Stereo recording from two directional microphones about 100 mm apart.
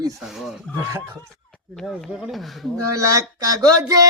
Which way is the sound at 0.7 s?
30° right (ahead or behind).